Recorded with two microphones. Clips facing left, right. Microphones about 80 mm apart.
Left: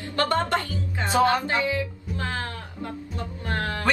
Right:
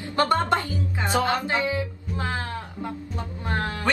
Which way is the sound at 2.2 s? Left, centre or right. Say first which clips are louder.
Right 1 dB; right.